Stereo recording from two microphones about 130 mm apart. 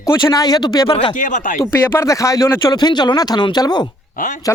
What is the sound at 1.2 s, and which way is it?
Speech, 90° left.